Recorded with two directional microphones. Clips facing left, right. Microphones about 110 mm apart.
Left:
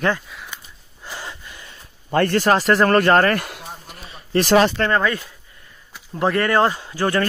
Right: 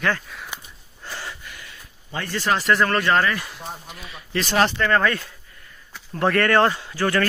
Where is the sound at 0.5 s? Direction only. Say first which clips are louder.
Right 1 dB; 15° right (ahead or behind).